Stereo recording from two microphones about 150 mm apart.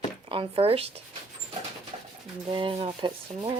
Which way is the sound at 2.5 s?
35° right (ahead or behind).